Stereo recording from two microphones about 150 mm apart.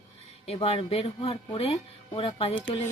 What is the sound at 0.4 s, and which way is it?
Speech, 40° left (ahead or behind).